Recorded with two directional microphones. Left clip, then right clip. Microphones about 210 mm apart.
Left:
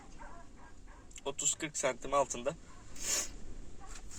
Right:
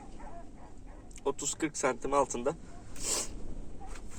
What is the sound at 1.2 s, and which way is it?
Speech, 15° left (ahead or behind).